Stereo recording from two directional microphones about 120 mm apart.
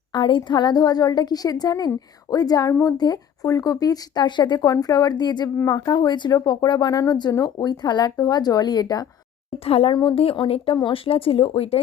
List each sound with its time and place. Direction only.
0.1 s speech: 40° left (ahead or behind)
9.6 s speech: 55° left (ahead or behind)